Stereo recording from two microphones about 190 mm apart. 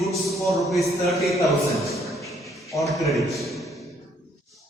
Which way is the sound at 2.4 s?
Centre (ahead or behind).